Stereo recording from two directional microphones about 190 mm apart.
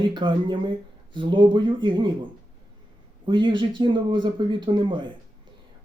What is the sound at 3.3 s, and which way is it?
Speech, 25° right (ahead or behind).